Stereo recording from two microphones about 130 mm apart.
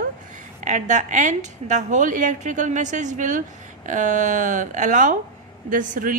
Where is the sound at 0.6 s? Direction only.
65° right (ahead or behind).